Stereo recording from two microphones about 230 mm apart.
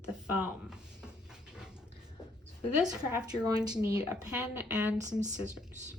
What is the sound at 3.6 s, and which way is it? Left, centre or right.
Speech, centre.